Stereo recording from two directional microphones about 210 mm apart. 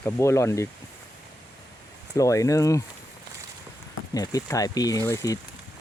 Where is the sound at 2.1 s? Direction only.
15° left (ahead or behind).